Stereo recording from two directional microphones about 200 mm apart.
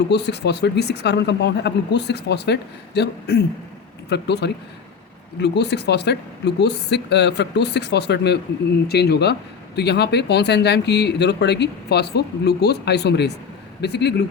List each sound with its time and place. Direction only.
0.1 s speech: 60° left (ahead or behind)